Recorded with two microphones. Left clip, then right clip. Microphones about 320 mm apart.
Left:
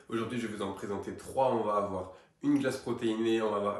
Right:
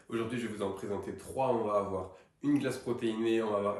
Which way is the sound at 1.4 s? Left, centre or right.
Centre.